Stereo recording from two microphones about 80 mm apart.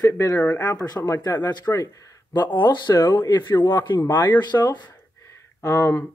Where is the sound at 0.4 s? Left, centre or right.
Centre.